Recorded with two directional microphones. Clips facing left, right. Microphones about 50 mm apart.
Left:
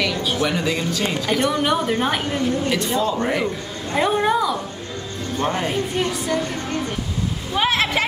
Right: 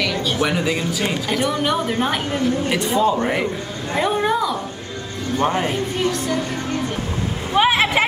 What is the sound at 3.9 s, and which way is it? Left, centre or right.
Speech, centre.